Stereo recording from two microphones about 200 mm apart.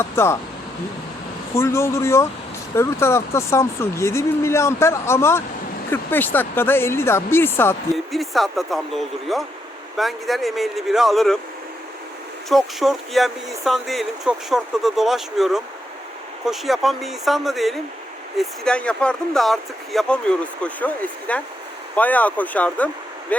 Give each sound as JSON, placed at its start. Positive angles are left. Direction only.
{"t": 0.0, "sound": "speech", "side_deg": 10}
{"t": 1.5, "sound": "speech", "side_deg": 15}
{"t": 7.9, "sound": "speech", "side_deg": 0}
{"t": 12.5, "sound": "speech", "side_deg": 0}